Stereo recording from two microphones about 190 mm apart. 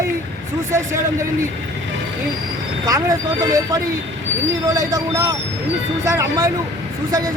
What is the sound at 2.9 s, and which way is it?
Speech, 20° right (ahead or behind).